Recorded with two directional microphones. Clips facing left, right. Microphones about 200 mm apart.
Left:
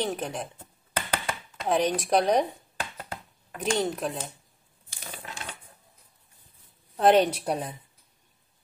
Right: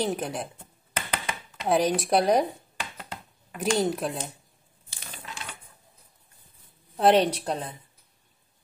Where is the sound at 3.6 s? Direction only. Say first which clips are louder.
Right 2 dB; 5° right (ahead or behind).